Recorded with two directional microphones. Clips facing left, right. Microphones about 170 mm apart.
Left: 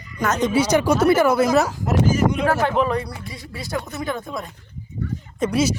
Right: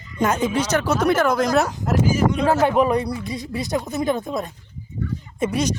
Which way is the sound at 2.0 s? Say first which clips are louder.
Even; 10° right (ahead or behind).